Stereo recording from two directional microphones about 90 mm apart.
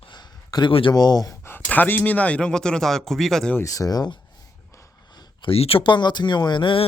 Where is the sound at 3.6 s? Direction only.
40° left (ahead or behind).